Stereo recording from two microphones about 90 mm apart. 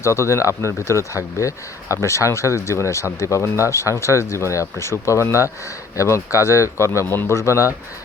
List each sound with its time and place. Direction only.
0.0 s speech: 30° left (ahead or behind)